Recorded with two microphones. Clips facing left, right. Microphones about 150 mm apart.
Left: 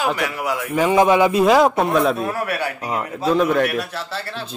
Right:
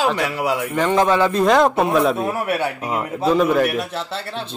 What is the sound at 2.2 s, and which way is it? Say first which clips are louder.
Speech: right 2 dB; 20° right (ahead or behind).